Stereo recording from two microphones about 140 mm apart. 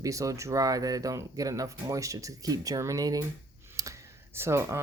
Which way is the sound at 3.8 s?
20° right (ahead or behind).